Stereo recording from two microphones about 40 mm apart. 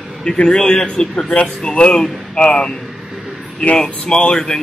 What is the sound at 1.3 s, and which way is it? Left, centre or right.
A man's voice, left.